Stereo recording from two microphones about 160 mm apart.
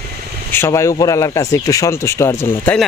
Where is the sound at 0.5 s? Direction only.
15° left (ahead or behind).